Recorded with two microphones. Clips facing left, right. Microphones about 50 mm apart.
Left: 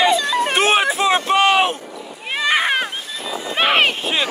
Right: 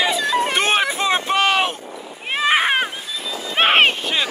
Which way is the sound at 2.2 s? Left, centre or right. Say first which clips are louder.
Right 1 dB; centre.